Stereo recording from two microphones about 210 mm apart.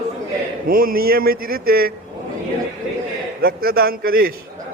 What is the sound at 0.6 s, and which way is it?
A man's voice, 45° right (ahead or behind).